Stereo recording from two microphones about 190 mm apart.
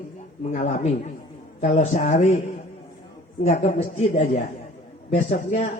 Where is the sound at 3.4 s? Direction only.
35° left (ahead or behind).